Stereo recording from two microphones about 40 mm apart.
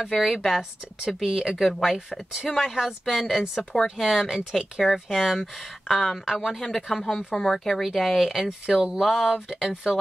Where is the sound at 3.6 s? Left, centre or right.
Centre.